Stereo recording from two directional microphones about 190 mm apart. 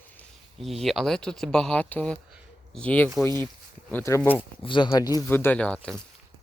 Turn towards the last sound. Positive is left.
turn(degrees=10)  # may be behind; listen again after turning